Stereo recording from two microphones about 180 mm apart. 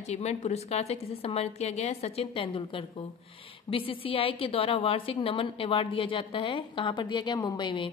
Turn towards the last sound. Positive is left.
turn(degrees=25)  # may be behind; listen again after turning